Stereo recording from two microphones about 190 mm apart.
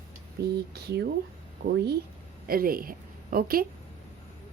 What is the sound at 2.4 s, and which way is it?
A woman's voice, 50° right (ahead or behind).